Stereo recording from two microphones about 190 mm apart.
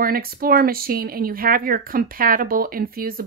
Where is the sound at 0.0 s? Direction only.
50° right (ahead or behind).